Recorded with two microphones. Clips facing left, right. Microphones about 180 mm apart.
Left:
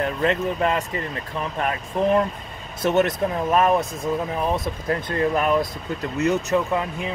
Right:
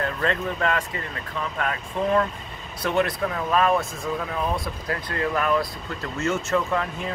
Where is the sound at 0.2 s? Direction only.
20° left (ahead or behind).